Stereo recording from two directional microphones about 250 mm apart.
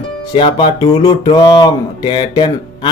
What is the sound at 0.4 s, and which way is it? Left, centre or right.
Speech, centre.